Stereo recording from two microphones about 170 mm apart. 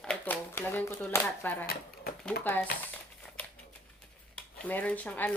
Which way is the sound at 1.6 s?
65° left (ahead or behind).